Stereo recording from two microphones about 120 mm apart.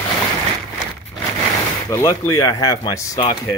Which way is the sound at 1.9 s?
30° left (ahead or behind).